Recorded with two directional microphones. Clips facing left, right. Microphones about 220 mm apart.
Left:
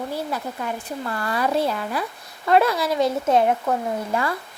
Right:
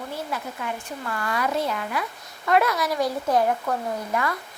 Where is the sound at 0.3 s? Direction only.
35° left (ahead or behind).